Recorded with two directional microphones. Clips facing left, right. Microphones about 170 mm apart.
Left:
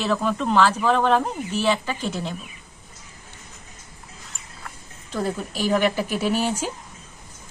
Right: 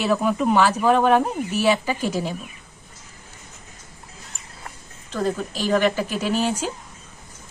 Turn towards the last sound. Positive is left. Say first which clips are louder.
# even
turn(degrees=10)  # may be behind; listen again after turning